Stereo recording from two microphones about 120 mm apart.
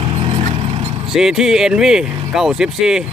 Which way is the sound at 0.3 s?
80° right.